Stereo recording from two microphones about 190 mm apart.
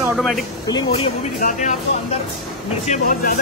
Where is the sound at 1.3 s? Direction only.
40° left (ahead or behind).